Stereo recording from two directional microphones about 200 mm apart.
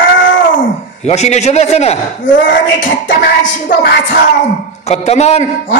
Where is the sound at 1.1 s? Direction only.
35° left (ahead or behind).